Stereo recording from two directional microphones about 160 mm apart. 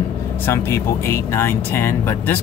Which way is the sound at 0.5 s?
15° left (ahead or behind).